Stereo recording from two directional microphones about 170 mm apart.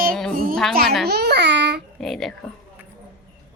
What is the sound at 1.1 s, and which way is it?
Speech, 75° right (ahead or behind).